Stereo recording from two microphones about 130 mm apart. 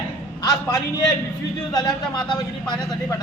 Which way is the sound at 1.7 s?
30° left (ahead or behind).